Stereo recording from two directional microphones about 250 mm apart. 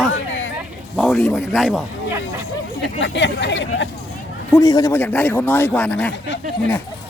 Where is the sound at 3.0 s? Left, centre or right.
Left.